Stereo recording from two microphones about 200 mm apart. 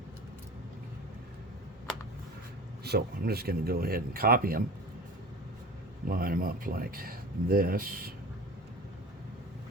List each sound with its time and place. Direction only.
2.8 s speech: 50° right (ahead or behind)
6.1 s speech: 45° right (ahead or behind)